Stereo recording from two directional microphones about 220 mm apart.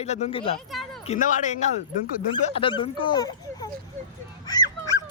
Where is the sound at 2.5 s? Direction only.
20° left (ahead or behind).